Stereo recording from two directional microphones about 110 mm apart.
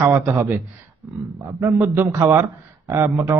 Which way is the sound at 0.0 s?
20° right (ahead or behind).